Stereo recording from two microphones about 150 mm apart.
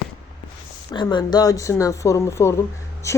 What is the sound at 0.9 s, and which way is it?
Speech, 30° left (ahead or behind).